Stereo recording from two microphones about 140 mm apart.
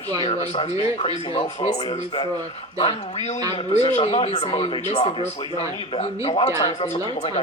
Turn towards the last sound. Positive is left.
turn(degrees=35)  # may be behind; listen again after turning